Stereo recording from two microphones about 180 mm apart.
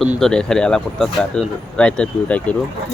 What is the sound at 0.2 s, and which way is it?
Speech, 5° left (ahead or behind).